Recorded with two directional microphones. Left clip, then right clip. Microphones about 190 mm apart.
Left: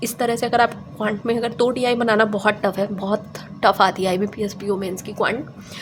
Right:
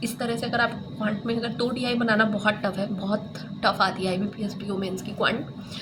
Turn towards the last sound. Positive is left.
turn(degrees=35)  # may be behind; listen again after turning